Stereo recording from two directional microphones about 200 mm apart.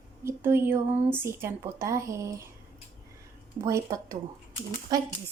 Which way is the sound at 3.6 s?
15° right (ahead or behind).